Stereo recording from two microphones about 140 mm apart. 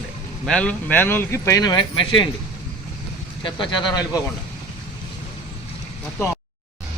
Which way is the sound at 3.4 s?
35° left (ahead or behind).